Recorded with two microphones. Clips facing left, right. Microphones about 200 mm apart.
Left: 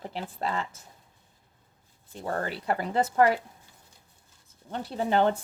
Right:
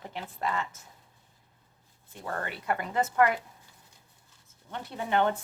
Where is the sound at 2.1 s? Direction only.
30° left (ahead or behind).